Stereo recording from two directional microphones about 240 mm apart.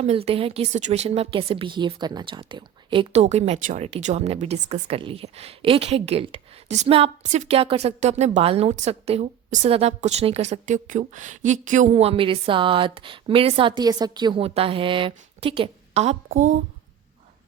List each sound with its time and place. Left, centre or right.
0.0 s a woman's voice: right